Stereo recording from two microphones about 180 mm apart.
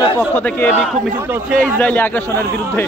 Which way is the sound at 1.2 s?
10° right (ahead or behind).